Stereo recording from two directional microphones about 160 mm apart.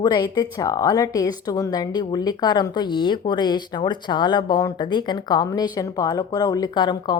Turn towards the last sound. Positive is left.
turn(degrees=25)  # may be behind; listen again after turning